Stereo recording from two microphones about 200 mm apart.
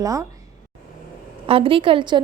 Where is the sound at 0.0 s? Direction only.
15° right (ahead or behind).